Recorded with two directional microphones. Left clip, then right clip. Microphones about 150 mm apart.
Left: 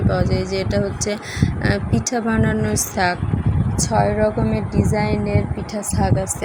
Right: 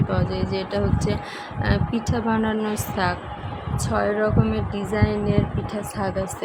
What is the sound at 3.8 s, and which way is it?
Speech, 20° left (ahead or behind).